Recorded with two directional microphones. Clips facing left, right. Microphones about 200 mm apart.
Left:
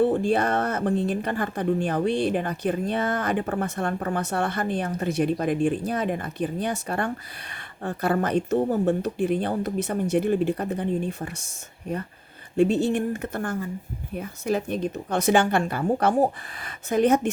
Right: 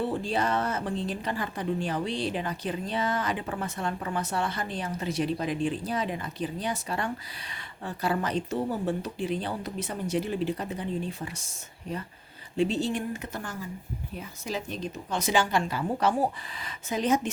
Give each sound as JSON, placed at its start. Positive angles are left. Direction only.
{"t": 0.0, "sound": "speech", "side_deg": 55}
{"t": 12.5, "sound": "speech", "side_deg": 50}